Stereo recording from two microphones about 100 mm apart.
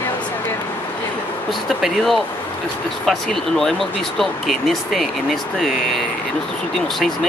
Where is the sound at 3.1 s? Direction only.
5° left (ahead or behind).